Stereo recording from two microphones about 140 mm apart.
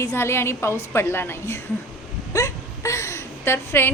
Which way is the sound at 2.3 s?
20° left (ahead or behind).